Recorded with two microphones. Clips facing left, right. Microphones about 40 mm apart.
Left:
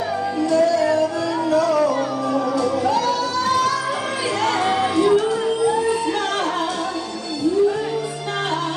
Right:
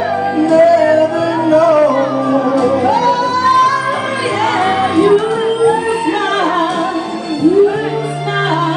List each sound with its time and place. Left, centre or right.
0.5 s music: right